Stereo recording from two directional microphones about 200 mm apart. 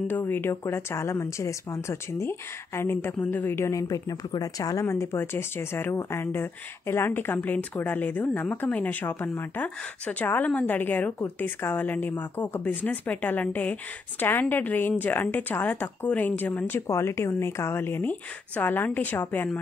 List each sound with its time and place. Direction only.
0.1 s speech: 10° left (ahead or behind)